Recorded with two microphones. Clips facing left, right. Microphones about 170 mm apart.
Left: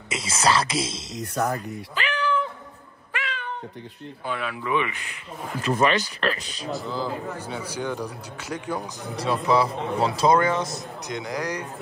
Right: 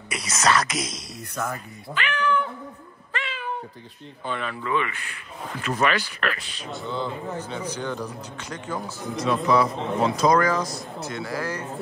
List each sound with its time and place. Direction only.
0.1 s speech: 30° left (ahead or behind)
3.1 s cat: centre (ahead or behind)
4.3 s speech: 5° left (ahead or behind)
5.6 s speech: 30° left (ahead or behind)
6.7 s speech: centre (ahead or behind)
9.1 s speech: 30° left (ahead or behind)